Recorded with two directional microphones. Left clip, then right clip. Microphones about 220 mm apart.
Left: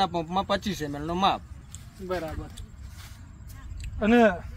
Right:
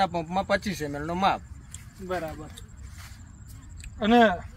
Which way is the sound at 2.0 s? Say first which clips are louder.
Even; 5° left (ahead or behind).